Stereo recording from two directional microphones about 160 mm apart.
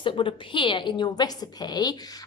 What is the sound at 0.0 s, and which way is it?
A woman's voice, 30° left (ahead or behind).